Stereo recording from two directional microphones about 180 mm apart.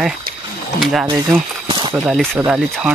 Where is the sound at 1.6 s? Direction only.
25° right (ahead or behind).